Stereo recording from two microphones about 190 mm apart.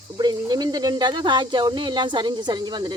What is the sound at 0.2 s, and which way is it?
Speech, 20° right (ahead or behind).